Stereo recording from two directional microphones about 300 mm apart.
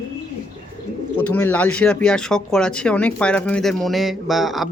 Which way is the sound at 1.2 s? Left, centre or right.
Centre.